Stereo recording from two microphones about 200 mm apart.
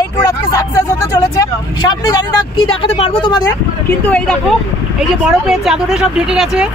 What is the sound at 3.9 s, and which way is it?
Speech, 5° left (ahead or behind).